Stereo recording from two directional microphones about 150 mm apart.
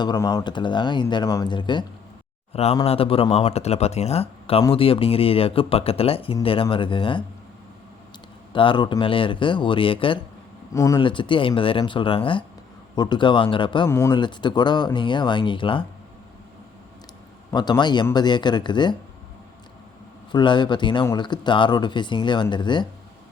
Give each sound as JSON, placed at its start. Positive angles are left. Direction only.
{"t": 0.0, "sound": "speech", "side_deg": 30}
{"t": 2.5, "sound": "speech", "side_deg": 45}
{"t": 8.5, "sound": "speech", "side_deg": 35}
{"t": 13.8, "sound": "speech", "side_deg": 15}
{"t": 14.1, "sound": "speech", "side_deg": 30}
{"t": 17.5, "sound": "speech", "side_deg": 30}
{"t": 20.3, "sound": "speech", "side_deg": 30}